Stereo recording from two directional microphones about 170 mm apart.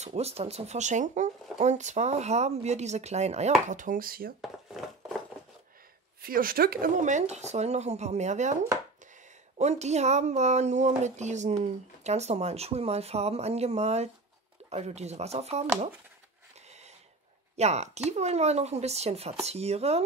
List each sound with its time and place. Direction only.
0.0 s speech: 40° right (ahead or behind); by 4.3 s 60° right (ahead or behind)
4.4 s dishes: centre (ahead or behind)
6.2 s speech: 60° right (ahead or behind)
9.6 s speech: 40° right (ahead or behind)
16.6 s a sound: 40° right (ahead or behind)
17.6 s speech: 40° right (ahead or behind)